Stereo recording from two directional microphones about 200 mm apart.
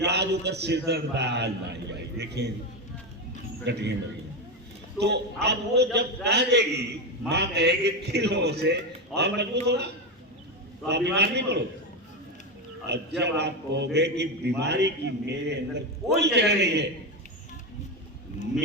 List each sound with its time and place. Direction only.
0.0 s a man's voice: 55° right (ahead or behind)
3.7 s a man's voice: 60° right (ahead or behind)
4.9 s a man's voice: 55° right (ahead or behind)
12.9 s a man's voice: 55° right (ahead or behind)